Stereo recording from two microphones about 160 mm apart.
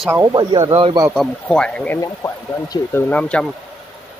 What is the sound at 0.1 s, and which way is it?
Speech, 25° right (ahead or behind).